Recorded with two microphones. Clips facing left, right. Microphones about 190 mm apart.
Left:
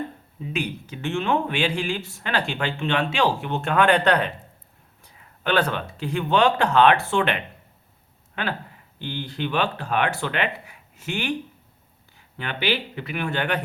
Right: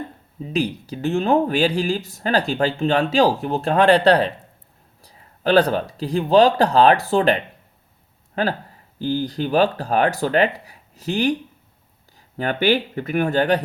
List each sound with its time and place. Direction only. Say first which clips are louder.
0.4 s speech: right 6 dB; 35° right (ahead or behind)